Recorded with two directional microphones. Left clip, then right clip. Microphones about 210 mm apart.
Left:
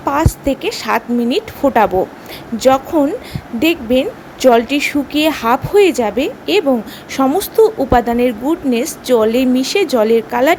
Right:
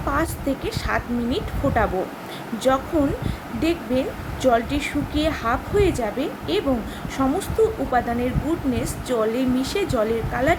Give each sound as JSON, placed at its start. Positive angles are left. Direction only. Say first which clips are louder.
{"t": 0.0, "sound": "speech", "louder": "left 8 dB", "side_deg": 35}